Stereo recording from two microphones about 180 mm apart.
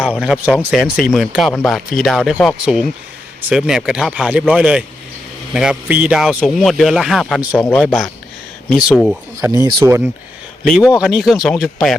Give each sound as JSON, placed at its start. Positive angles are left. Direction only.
{"t": 0.2, "sound": "a man's voice", "side_deg": -5}
{"t": 7.6, "sound": "speech", "side_deg": 10}
{"t": 7.9, "sound": "a man's voice", "side_deg": 0}
{"t": 9.4, "sound": "speech", "side_deg": -20}
{"t": 10.6, "sound": "a man's voice", "side_deg": 0}